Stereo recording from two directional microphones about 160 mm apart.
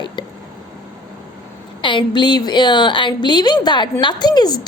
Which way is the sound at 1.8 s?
30° left (ahead or behind).